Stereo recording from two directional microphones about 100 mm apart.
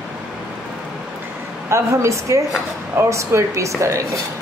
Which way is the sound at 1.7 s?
30° right (ahead or behind).